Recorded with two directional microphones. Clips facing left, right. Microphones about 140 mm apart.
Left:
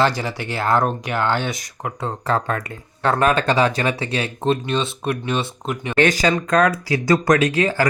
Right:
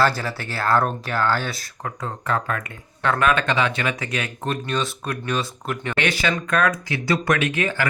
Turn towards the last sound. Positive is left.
turn(degrees=35)  # may be behind; listen again after turning